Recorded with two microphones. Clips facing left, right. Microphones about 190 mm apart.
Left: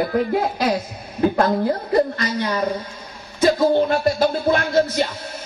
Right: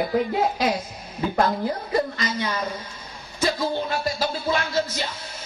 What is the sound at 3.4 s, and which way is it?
Music, 55° left (ahead or behind).